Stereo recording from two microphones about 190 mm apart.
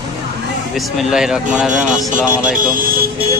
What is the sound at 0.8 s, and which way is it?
Speech, centre (ahead or behind).